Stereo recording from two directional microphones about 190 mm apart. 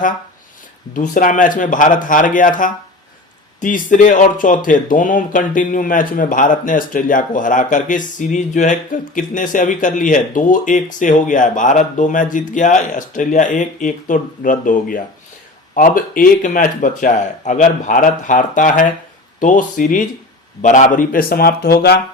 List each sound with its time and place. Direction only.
0.9 s speech: 45° left (ahead or behind)